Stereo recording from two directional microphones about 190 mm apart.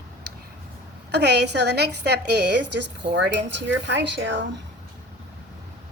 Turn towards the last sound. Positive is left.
turn(degrees=-70)  # may be behind; listen again after turning